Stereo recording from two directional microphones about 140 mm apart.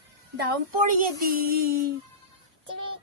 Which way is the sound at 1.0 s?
90° right.